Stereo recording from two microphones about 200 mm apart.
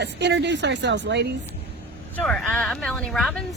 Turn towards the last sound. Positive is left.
turn(degrees=0)  # may be behind; listen again after turning